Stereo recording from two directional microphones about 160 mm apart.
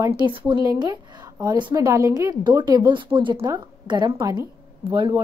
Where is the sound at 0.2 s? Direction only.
30° right (ahead or behind).